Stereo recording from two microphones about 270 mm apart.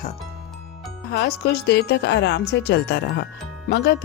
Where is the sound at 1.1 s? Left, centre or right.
Left.